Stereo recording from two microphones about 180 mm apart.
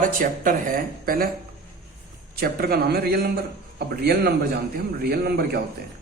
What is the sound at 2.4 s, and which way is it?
A man's voice, 60° right (ahead or behind).